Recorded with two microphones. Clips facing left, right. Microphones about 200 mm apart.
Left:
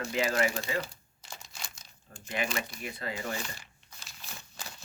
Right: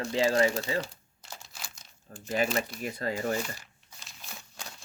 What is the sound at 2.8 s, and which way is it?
Speech, 40° right (ahead or behind).